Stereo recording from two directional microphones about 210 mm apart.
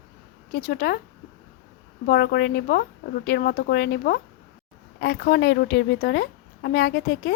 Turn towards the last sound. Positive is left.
turn(degrees=50)  # may be behind; listen again after turning